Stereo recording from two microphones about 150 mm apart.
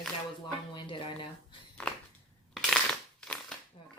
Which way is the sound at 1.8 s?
10° left (ahead or behind).